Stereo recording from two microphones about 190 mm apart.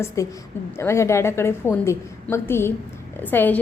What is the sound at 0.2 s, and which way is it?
A woman's voice, 15° left (ahead or behind).